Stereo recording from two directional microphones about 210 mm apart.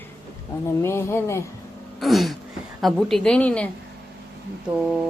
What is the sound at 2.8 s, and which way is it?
Speech, centre (ahead or behind).